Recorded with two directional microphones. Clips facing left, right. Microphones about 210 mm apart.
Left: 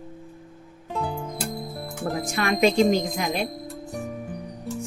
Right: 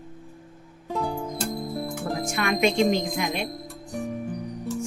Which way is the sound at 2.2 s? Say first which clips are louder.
Left 2 dB; 35° left (ahead or behind).